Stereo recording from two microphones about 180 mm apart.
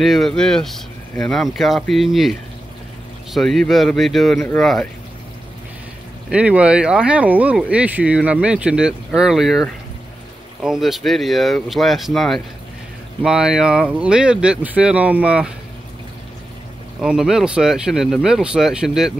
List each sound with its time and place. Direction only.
0.0 s speech: centre (ahead or behind)
3.3 s speech: centre (ahead or behind)
6.3 s speech: 5° right (ahead or behind)
17.0 s speech: 5° right (ahead or behind)